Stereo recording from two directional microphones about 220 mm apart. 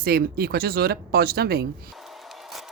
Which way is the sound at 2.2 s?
Centre (ahead or behind).